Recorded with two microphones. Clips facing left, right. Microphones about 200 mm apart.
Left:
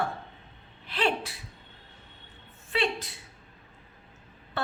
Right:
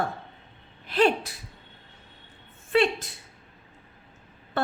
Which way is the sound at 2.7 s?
45° right (ahead or behind).